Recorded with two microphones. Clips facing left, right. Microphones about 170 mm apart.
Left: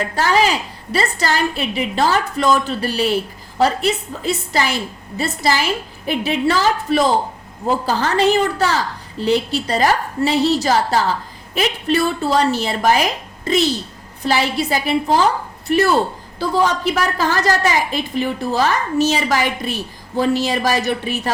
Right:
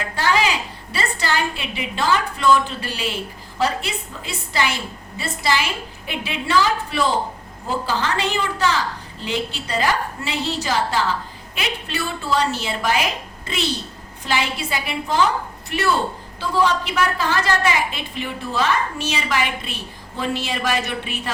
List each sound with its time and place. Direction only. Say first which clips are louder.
0.2 s a woman's voice: left 3 dB; 40° left (ahead or behind)
16.4 s a woman's voice: left 3 dB; 40° left (ahead or behind)